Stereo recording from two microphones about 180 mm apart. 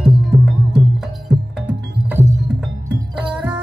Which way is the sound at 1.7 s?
10° right (ahead or behind).